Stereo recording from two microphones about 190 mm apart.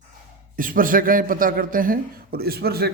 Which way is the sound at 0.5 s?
45° right (ahead or behind).